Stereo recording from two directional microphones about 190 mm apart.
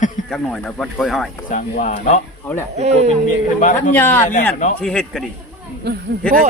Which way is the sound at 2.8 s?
35° right (ahead or behind).